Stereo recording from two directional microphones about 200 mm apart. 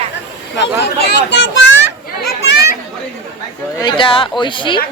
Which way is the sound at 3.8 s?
25° left (ahead or behind).